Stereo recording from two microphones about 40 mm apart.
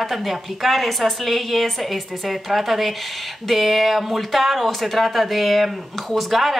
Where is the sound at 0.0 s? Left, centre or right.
Centre.